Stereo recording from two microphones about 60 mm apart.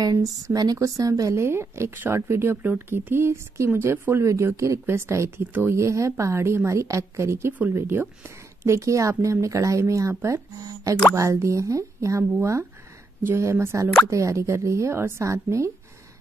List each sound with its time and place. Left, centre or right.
0.0 s speech: right
1.3 s speech: right
4.2 s speech: right
5.4 s speech: right
5.8 s speech: right
8.6 s speech: right
11.1 s speech: right